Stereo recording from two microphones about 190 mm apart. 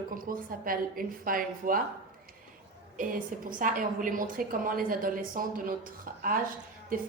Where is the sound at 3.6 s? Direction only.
45° right (ahead or behind).